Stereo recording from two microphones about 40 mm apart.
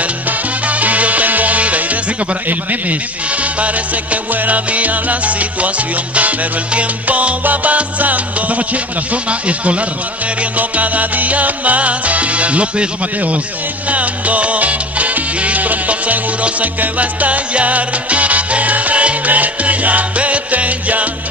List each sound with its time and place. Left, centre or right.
0.7 s music: right
3.5 s salsa music: right